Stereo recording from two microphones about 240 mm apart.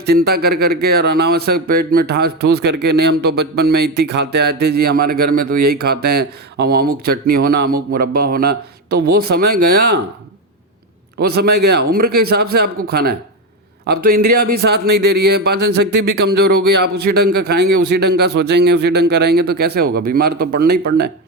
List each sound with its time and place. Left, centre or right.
0.0 s speech: right
11.2 s speech: right